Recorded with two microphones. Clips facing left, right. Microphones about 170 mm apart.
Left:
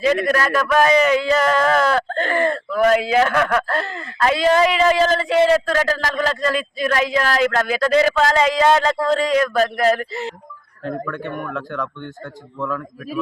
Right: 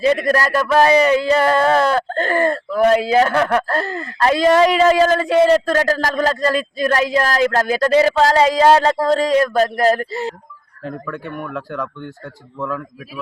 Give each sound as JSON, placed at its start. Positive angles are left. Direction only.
{"t": 0.0, "sound": "speech", "side_deg": -35}
{"t": 10.8, "sound": "a man's voice", "side_deg": -5}